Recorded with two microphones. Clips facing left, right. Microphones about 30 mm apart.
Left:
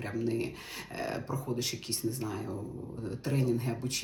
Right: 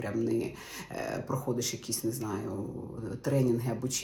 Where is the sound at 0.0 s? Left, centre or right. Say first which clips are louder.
Right 2 dB; left.